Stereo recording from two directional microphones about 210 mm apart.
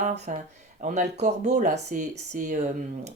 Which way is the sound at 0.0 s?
35° right (ahead or behind).